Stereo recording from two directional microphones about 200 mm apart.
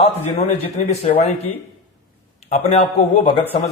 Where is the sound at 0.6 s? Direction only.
30° left (ahead or behind).